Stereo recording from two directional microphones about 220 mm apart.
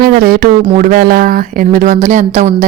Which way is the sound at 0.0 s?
40° right (ahead or behind).